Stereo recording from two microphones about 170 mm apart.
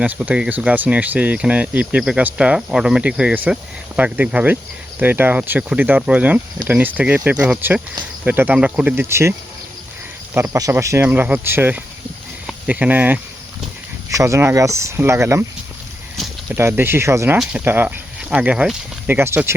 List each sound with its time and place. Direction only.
0.0 s speech: 5° right (ahead or behind)
10.3 s speech: 15° right (ahead or behind)
16.1 s a sound: centre (ahead or behind)
16.6 s speech: 15° right (ahead or behind)
17.3 s speech: 5° right (ahead or behind)